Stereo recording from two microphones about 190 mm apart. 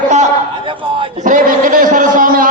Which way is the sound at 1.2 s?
45° right (ahead or behind).